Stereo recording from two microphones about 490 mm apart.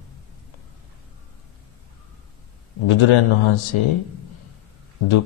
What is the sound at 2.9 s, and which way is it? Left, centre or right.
A man's voice, left.